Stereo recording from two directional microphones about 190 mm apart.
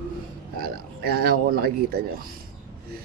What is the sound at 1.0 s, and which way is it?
Speech, 55° right (ahead or behind).